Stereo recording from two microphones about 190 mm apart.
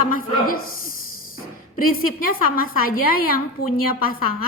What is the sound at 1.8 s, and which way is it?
A woman's voice, 50° left (ahead or behind).